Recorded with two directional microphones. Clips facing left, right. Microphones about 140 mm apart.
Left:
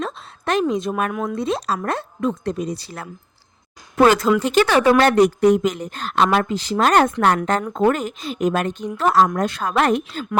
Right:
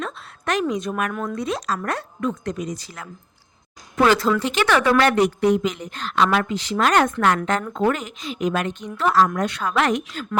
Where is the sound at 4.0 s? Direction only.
45° left (ahead or behind).